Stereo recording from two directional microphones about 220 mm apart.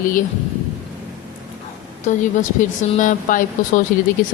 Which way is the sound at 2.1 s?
35° left (ahead or behind).